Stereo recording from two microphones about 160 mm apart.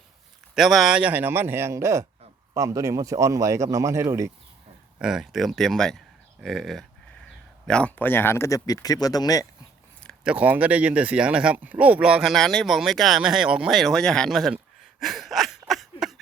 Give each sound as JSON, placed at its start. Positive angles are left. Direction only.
{"t": 0.5, "sound": "speech", "side_deg": 0}
{"t": 4.9, "sound": "speech", "side_deg": -5}
{"t": 10.2, "sound": "speech", "side_deg": -10}
{"t": 15.0, "sound": "a sound", "side_deg": 0}